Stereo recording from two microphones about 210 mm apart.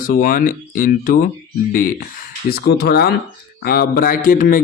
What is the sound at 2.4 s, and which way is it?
Speech, 50° left (ahead or behind).